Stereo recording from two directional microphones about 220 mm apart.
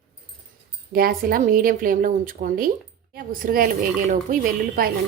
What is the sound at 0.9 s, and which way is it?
A woman's voice, 40° right (ahead or behind).